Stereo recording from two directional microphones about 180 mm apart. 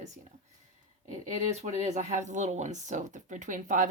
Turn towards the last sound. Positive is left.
turn(degrees=-45)  # may be behind; listen again after turning